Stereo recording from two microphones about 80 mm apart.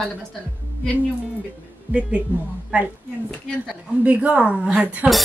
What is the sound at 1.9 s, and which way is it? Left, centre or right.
Speech, centre.